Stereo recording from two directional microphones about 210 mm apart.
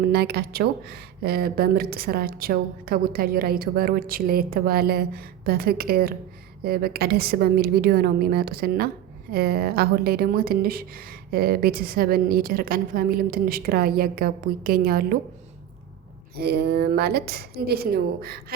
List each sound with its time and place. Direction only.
0.1 s speech: 50° right (ahead or behind)
16.4 s speech: 50° right (ahead or behind)